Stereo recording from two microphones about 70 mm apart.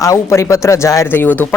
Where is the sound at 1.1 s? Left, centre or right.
Left.